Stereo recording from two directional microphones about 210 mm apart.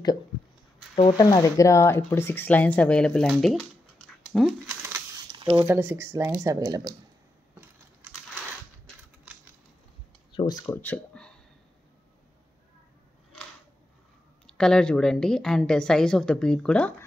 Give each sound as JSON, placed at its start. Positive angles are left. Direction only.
{"t": 0.9, "sound": "speech", "side_deg": 20}
{"t": 4.3, "sound": "a sound", "side_deg": 0}
{"t": 5.3, "sound": "a sound", "side_deg": -25}
{"t": 5.7, "sound": "speech", "side_deg": -10}
{"t": 10.3, "sound": "speech", "side_deg": 20}
{"t": 14.4, "sound": "a woman's voice", "side_deg": 5}